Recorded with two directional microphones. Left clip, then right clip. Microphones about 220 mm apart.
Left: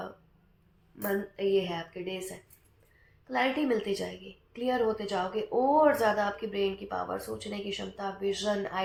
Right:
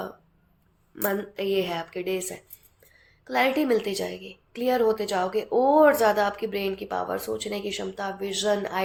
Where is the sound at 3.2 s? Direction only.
40° right (ahead or behind).